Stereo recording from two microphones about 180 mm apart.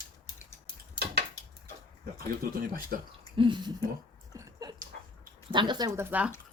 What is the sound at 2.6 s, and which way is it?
Speech, 50° right (ahead or behind).